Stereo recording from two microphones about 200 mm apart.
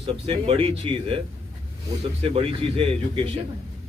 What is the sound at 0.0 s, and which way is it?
A man's voice, 25° right (ahead or behind).